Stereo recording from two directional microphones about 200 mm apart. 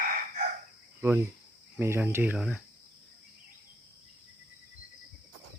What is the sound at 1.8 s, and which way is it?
Speech, 10° right (ahead or behind).